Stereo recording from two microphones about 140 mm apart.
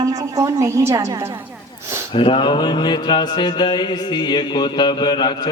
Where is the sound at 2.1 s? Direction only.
40° left (ahead or behind).